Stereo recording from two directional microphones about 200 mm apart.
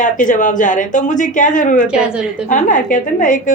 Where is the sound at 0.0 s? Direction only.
40° left (ahead or behind).